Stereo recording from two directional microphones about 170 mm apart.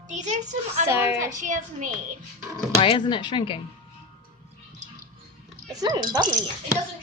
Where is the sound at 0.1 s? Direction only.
45° right (ahead or behind).